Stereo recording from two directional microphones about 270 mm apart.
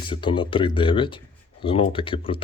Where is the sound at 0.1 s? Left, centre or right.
Centre.